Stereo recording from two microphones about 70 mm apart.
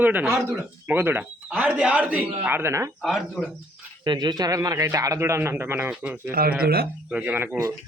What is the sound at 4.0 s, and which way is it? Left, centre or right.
Speech, right.